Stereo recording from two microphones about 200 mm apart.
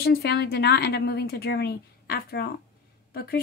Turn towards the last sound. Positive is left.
turn(degrees=50)  # may be behind; listen again after turning